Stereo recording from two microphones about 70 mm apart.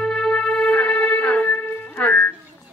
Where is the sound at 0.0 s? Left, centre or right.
Centre; by 2.2 s left.